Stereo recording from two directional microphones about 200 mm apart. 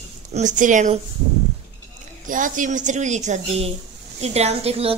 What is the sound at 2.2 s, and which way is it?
Speech, 40° right (ahead or behind).